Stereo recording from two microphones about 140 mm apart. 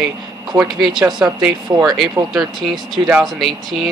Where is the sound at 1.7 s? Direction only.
20° right (ahead or behind).